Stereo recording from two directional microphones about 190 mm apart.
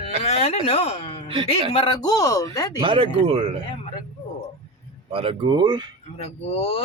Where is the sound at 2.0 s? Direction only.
20° left (ahead or behind).